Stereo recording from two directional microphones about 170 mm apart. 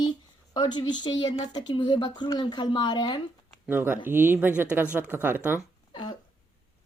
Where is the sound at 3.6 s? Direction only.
10° right (ahead or behind).